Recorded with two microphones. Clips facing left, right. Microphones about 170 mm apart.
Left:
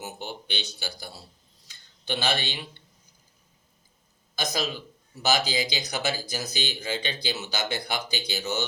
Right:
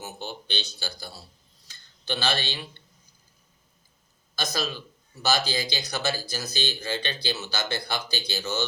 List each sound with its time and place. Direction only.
0.0 s speech: 15° left (ahead or behind)
1.6 s a sound: 20° left (ahead or behind)
4.4 s speech: 20° left (ahead or behind)